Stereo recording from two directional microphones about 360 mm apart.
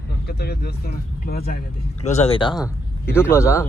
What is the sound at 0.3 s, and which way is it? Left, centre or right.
Speech, left.